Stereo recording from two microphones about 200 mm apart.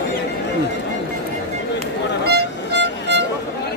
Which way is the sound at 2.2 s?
55° right (ahead or behind).